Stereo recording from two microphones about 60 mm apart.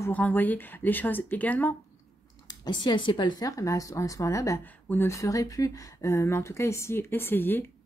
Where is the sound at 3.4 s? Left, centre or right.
Left.